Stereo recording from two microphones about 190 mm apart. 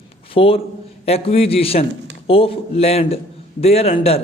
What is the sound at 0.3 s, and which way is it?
A man's voice, 30° left (ahead or behind).